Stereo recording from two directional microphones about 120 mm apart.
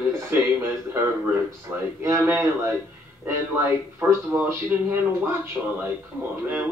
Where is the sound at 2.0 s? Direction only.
20° right (ahead or behind).